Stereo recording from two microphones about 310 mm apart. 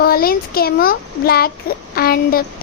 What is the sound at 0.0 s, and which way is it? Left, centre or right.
Speech, left.